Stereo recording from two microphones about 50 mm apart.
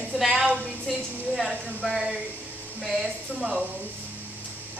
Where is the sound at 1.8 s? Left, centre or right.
Centre.